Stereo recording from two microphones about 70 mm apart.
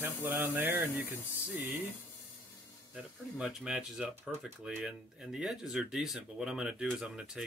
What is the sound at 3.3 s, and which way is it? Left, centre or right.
Speech, centre.